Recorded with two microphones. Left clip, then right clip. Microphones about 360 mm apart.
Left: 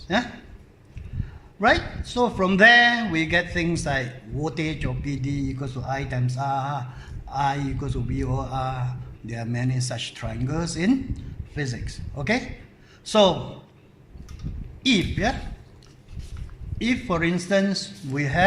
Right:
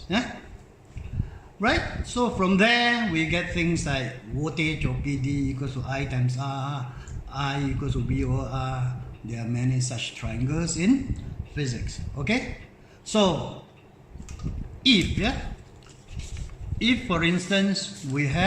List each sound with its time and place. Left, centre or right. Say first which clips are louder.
1.6 s a man's voice: left 4 dB; centre
14.8 s a man's voice: right 1 dB; centre
16.7 s a man's voice: even; centre